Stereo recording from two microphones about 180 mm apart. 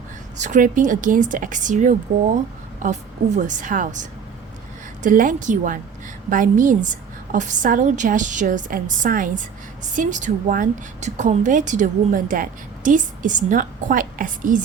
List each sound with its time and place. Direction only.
0.3 s a woman's voice: 45° right (ahead or behind)
5.0 s a woman's voice: 45° right (ahead or behind)